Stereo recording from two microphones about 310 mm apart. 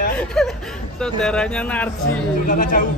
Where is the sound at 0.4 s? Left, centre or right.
Centre.